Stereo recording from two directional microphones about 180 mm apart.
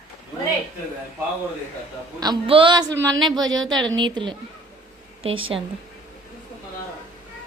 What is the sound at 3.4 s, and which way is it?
Speech, 90° right.